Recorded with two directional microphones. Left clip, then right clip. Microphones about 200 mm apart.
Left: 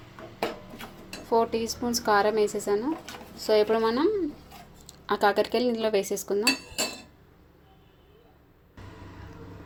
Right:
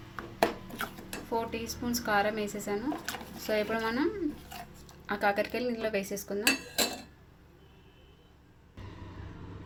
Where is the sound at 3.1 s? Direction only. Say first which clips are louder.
Right 3 dB; 30° right (ahead or behind).